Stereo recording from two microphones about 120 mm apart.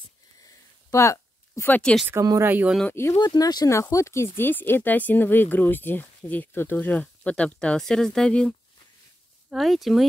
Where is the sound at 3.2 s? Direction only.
35° left (ahead or behind); by 8.5 s 5° left (ahead or behind).